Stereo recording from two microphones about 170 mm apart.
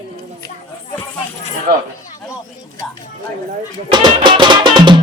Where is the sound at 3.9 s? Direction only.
25° right (ahead or behind).